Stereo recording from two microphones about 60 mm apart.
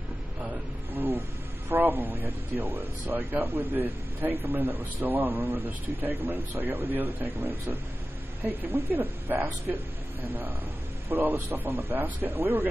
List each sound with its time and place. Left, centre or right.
1.7 s speech: right
11.1 s speech: right